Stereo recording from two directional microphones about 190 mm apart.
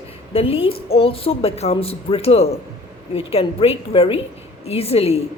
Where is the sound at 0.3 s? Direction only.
30° left (ahead or behind).